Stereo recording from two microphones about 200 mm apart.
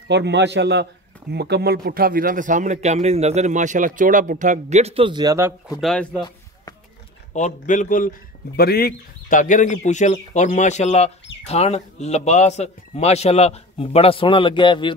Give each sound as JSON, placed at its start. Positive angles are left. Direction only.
{"t": 0.1, "sound": "a man's voice", "side_deg": -60}
{"t": 5.8, "sound": "speech", "side_deg": 0}
{"t": 7.3, "sound": "a man's voice", "side_deg": 40}
{"t": 8.5, "sound": "a man's voice", "side_deg": 50}